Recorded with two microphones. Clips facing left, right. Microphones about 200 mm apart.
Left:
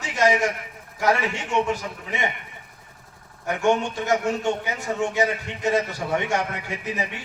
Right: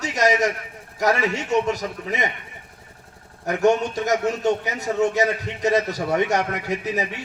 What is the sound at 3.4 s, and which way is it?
A man's voice, 40° right (ahead or behind).